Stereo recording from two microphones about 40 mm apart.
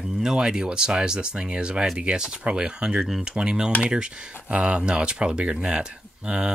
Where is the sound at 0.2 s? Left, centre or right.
Centre.